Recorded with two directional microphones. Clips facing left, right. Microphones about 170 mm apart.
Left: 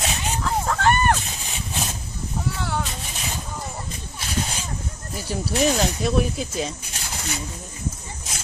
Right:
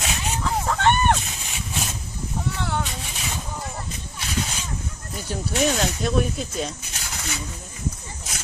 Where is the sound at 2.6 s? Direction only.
Centre (ahead or behind).